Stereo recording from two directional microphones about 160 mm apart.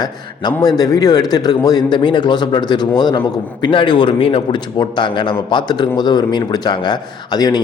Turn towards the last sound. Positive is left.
turn(degrees=25)  # may be behind; listen again after turning